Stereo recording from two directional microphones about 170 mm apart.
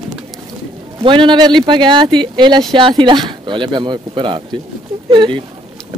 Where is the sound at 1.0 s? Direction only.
30° right (ahead or behind).